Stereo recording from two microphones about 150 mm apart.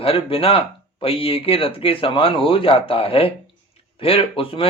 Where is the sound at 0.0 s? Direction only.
40° left (ahead or behind).